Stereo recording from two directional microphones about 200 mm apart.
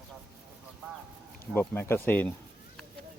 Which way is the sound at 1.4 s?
10° left (ahead or behind).